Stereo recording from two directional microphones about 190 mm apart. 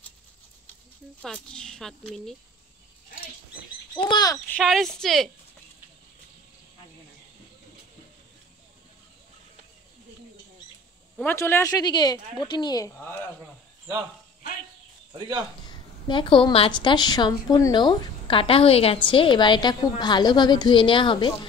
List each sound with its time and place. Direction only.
1.2 s speech: 5° left (ahead or behind)
4.1 s a woman's voice: 20° left (ahead or behind)
4.5 s speech: 5° left (ahead or behind)
11.1 s a woman's voice: 10° left (ahead or behind)
15.1 s speech: 20° right (ahead or behind)
16.1 s a woman's voice: 25° left (ahead or behind)